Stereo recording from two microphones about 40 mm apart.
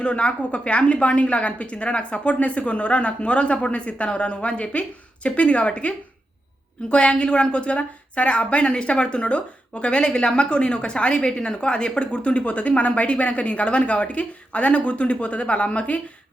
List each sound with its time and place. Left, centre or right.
0.0 s a woman's voice: left
6.9 s a woman's voice: left